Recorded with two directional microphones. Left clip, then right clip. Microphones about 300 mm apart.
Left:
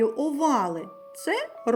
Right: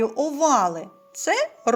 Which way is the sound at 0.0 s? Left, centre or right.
Centre.